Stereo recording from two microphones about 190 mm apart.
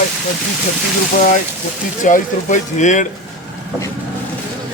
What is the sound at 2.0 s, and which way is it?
Speech, 40° left (ahead or behind).